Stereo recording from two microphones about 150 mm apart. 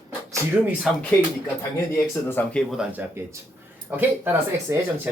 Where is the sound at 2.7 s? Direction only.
10° right (ahead or behind).